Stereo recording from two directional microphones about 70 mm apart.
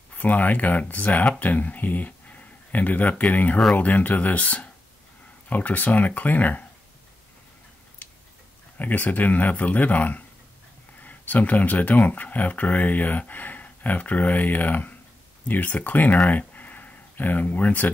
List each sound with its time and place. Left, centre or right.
0.1 s speech: left
8.7 s speech: left